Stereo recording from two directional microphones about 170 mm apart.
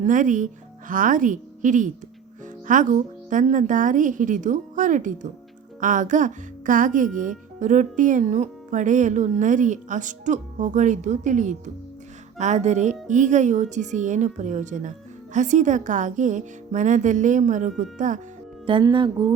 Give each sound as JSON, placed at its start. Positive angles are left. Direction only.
{"t": 0.0, "sound": "speech", "side_deg": -50}
{"t": 18.6, "sound": "music", "side_deg": -30}